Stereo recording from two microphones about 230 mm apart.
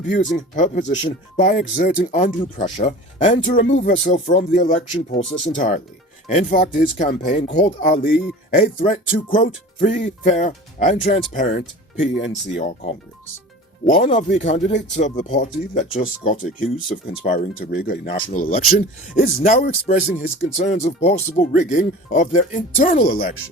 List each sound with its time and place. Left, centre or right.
0.1 s speech: left
7.4 s speech: left
8.4 s speech: left
12.2 s speech: left
13.8 s speech: left